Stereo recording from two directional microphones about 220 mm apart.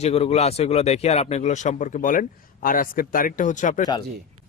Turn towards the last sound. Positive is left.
turn(degrees=35)  # may be behind; listen again after turning